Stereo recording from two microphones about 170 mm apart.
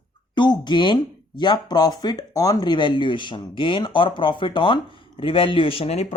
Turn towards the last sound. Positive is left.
turn(degrees=40)  # may be behind; listen again after turning